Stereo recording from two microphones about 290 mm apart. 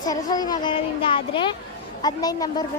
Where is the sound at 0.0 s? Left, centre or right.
Centre.